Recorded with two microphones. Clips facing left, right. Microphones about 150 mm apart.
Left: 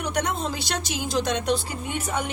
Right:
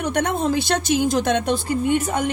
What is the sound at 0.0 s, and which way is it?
A woman's voice, 55° right (ahead or behind).